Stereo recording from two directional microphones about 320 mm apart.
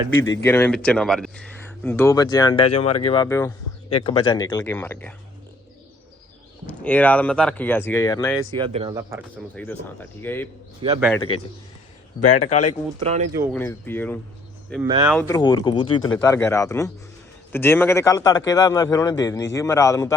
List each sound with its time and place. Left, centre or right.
0.3 s speech: centre
6.7 s speech: centre
8.5 s speech: centre
9.3 s speech: centre
10.8 s speech: centre
11.3 s a man's voice: left
12.2 s speech: left
13.0 s speech: centre
13.5 s speech: centre
14.8 s speech: centre
15.1 s speech: centre